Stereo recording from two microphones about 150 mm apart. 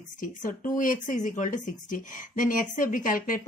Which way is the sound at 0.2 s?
60° left (ahead or behind).